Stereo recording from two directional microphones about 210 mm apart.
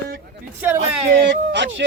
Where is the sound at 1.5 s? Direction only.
60° right (ahead or behind).